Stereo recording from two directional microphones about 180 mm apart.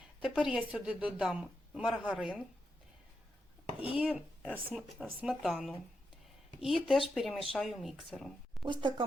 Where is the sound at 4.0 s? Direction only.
5° right (ahead or behind).